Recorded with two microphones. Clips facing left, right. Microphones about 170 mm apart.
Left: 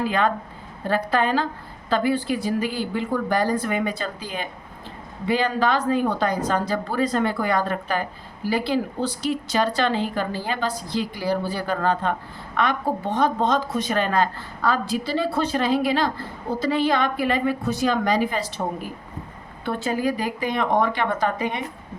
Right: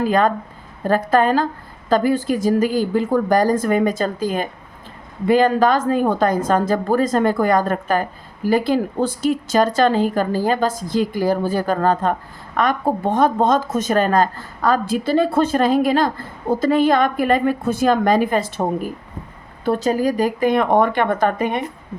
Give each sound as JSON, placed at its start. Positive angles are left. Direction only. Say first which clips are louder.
{"t": 0.0, "sound": "speech", "louder": "right 5 dB", "side_deg": -45}
{"t": 19.6, "sound": "speech", "louder": "right 6 dB", "side_deg": -40}